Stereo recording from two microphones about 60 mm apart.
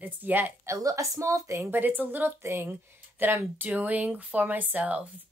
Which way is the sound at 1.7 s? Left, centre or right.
Right.